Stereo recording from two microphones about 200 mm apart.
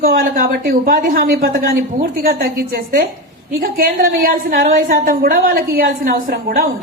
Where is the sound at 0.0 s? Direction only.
45° right (ahead or behind).